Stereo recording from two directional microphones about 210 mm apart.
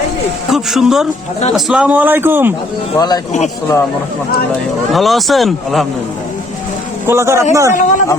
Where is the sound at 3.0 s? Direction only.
20° left (ahead or behind).